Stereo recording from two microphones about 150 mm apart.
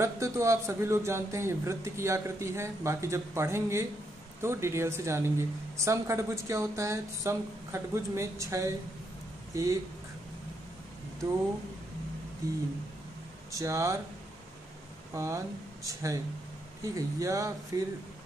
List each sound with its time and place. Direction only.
0.0 s a man's voice: 20° right (ahead or behind)
12.4 s a man's voice: 20° right (ahead or behind)
15.1 s a man's voice: 20° right (ahead or behind)